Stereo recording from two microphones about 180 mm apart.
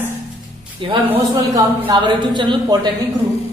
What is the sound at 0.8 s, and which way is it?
A man's voice, 30° right (ahead or behind).